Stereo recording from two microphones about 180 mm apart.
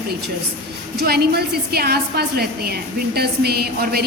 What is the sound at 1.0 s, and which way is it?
A woman's voice, 65° right (ahead or behind).